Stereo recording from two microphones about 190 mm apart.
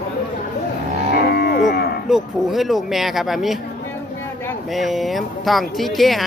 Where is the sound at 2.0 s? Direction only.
Centre (ahead or behind).